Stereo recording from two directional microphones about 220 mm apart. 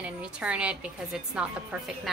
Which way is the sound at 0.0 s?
5° right (ahead or behind).